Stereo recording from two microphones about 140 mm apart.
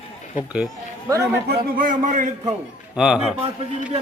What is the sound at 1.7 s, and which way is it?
Speech, 75° right (ahead or behind).